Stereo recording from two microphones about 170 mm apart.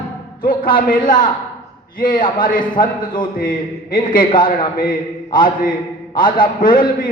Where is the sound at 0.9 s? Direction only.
55° left (ahead or behind).